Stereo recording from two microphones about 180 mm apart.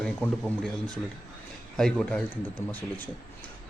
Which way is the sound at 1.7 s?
5° left (ahead or behind).